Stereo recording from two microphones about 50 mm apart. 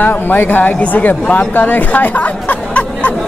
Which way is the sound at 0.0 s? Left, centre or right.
Left.